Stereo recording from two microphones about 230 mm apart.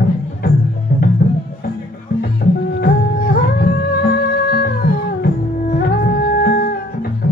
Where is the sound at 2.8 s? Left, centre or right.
Left.